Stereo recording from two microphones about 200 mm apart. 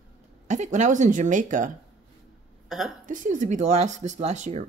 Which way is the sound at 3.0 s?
40° right (ahead or behind).